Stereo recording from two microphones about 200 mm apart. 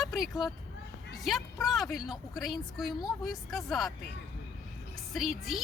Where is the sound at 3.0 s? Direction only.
20° left (ahead or behind).